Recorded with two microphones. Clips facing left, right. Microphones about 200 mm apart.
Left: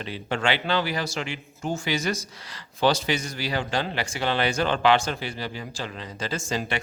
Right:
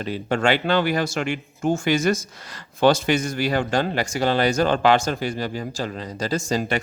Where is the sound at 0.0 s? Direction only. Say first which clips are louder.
Right 5 dB; 45° right (ahead or behind).